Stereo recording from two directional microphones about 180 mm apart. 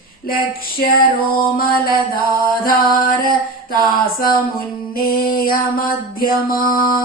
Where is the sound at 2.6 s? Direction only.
55° left (ahead or behind).